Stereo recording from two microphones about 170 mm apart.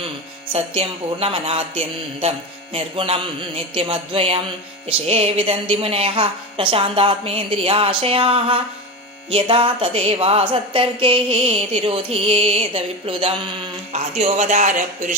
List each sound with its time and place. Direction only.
0.5 s speech: 35° right (ahead or behind)